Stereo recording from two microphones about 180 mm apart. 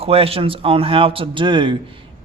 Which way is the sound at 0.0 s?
30° right (ahead or behind).